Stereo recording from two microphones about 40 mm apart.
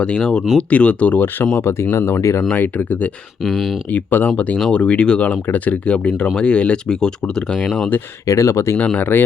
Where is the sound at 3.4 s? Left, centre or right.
Centre.